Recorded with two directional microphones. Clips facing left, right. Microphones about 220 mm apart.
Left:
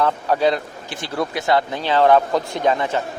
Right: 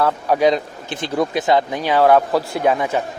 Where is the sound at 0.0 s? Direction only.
10° right (ahead or behind).